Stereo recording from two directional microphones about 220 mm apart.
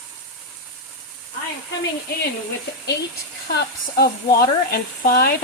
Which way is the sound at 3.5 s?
45° left (ahead or behind).